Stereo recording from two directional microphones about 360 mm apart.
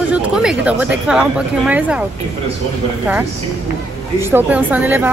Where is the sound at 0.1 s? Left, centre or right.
Centre.